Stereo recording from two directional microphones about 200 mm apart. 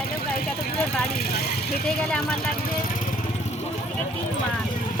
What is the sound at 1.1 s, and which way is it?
Speech, 50° left (ahead or behind).